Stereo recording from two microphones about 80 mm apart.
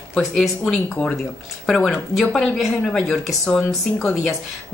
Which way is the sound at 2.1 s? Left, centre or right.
Centre.